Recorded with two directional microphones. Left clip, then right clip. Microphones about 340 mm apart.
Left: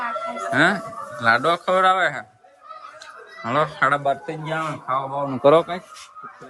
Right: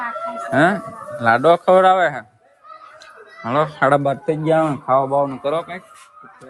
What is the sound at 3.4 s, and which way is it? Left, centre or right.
Speech, centre.